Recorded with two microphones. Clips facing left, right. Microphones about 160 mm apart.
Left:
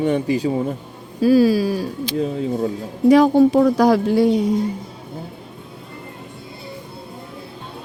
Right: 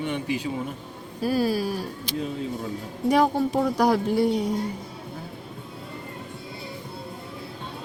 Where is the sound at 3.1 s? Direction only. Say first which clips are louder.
Left 9 dB; 90° left.